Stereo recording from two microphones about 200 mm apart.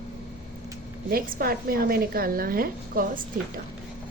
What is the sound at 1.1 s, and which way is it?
A woman's voice, 50° right (ahead or behind).